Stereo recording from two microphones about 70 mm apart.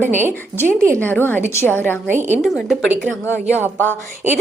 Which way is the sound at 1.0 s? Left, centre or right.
Left.